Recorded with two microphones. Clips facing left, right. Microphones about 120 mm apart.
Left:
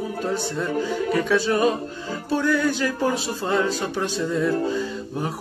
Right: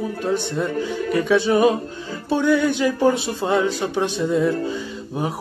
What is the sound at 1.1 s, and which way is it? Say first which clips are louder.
Speech: right 4 dB; 15° right (ahead or behind).